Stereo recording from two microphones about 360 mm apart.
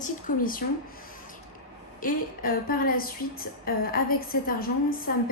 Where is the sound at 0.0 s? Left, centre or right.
Left.